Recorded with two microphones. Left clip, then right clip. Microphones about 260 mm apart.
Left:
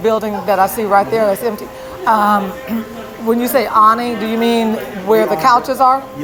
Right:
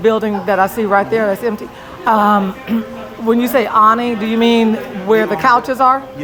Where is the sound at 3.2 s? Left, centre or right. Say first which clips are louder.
Right 1 dB; centre.